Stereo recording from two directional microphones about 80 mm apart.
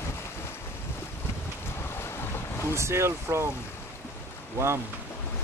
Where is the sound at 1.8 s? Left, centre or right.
Left.